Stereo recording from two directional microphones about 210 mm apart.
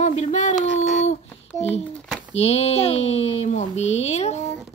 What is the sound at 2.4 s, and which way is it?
Speech, 30° left (ahead or behind).